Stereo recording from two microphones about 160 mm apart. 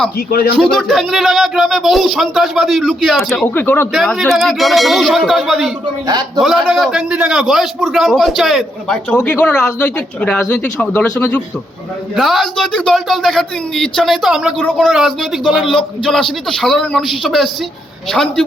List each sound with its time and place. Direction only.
0.3 s a man's voice: 70° left (ahead or behind)
0.6 s a man's voice: centre (ahead or behind)
3.4 s a man's voice: 10° left (ahead or behind)
6.1 s a man's voice: 25° right (ahead or behind)
6.4 s a man's voice: centre (ahead or behind)